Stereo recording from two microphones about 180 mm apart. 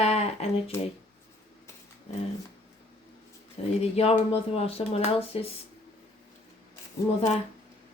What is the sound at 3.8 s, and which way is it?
Speech, 35° left (ahead or behind).